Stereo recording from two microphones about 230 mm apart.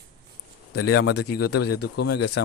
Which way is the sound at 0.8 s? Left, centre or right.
Left.